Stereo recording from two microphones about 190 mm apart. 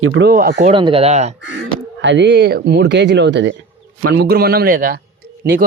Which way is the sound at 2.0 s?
70° right (ahead or behind).